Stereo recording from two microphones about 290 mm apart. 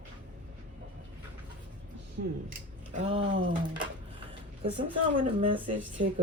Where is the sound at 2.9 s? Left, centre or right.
Centre.